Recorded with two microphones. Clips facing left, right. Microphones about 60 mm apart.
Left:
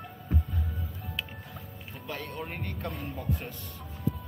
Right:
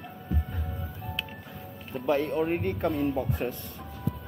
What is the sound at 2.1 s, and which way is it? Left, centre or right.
Speech, right.